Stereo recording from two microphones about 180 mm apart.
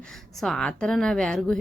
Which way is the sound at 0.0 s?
5° left (ahead or behind).